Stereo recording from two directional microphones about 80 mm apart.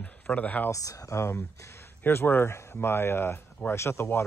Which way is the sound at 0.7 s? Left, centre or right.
Left.